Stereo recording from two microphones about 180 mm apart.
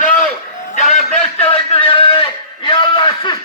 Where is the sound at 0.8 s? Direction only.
40° left (ahead or behind).